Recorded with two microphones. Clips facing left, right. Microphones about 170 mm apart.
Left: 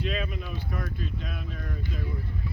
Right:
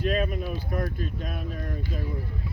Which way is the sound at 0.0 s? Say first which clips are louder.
Right 6 dB; 45° right (ahead or behind).